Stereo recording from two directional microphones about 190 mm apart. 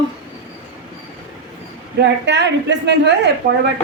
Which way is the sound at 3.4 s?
35° right (ahead or behind).